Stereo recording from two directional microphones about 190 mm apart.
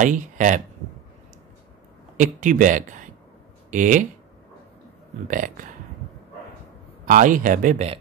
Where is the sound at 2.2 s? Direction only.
45° right (ahead or behind).